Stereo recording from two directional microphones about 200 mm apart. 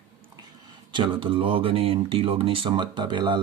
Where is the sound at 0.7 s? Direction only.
25° right (ahead or behind).